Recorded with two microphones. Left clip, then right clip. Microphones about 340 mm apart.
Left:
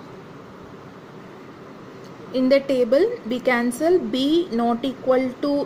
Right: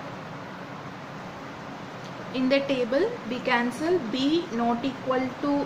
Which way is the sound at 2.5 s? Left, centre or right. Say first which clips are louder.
Left 6 dB; left.